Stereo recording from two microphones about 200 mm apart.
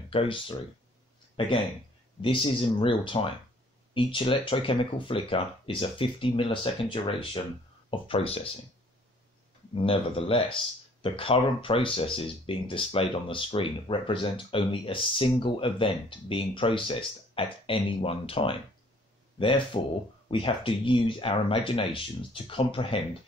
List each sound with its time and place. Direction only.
0.1 s speech: 25° left (ahead or behind)
9.8 s speech: 25° left (ahead or behind)